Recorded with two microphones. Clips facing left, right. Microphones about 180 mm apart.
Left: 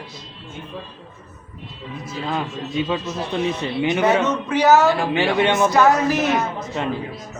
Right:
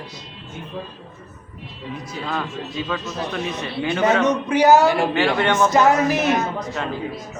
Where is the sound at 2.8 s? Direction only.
20° left (ahead or behind).